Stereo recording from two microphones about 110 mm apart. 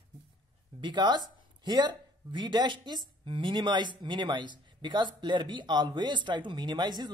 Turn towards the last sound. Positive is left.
turn(degrees=-40)  # may be behind; listen again after turning